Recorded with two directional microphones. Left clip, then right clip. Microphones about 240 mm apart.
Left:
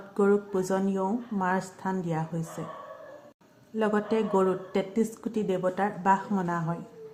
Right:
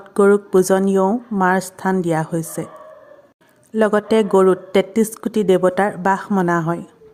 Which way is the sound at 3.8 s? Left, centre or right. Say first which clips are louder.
Right 11 dB; right.